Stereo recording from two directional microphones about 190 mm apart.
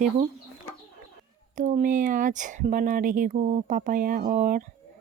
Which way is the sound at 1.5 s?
40° right (ahead or behind).